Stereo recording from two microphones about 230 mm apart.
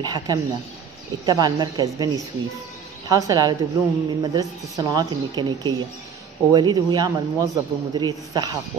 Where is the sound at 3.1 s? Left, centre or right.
Centre.